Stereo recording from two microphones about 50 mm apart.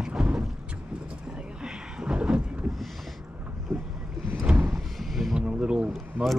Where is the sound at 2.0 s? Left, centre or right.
Right.